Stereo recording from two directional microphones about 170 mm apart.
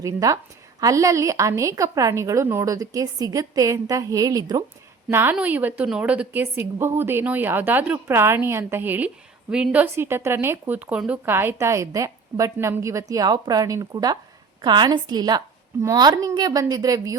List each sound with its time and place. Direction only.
0.0 s a woman's voice: 20° right (ahead or behind)
5.1 s a woman's voice: 10° right (ahead or behind)